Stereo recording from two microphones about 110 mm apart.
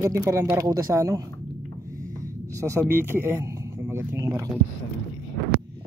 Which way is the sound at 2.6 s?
20° right (ahead or behind).